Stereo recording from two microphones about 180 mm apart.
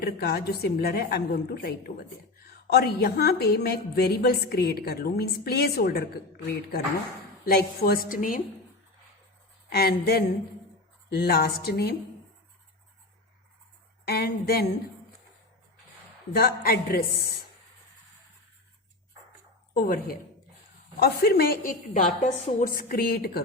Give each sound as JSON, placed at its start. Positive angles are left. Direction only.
{"t": 0.0, "sound": "a woman's voice", "side_deg": 60}
{"t": 9.6, "sound": "a woman's voice", "side_deg": 60}
{"t": 14.1, "sound": "a woman's voice", "side_deg": 60}
{"t": 16.3, "sound": "a woman's voice", "side_deg": 55}
{"t": 19.7, "sound": "a woman's voice", "side_deg": 55}